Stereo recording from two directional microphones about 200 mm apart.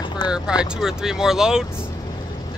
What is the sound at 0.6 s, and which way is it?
Speech, centre (ahead or behind).